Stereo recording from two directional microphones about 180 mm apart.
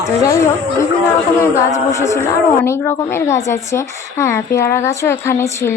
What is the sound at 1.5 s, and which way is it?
A woman's voice, 15° left (ahead or behind).